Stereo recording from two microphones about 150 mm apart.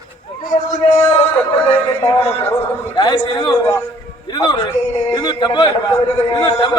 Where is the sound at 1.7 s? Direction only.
15° left (ahead or behind).